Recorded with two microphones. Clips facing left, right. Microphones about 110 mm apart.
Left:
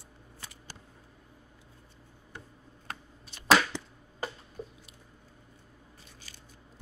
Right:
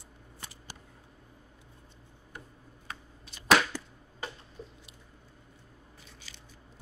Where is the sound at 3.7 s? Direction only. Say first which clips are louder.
Left 1 dB; 20° left (ahead or behind).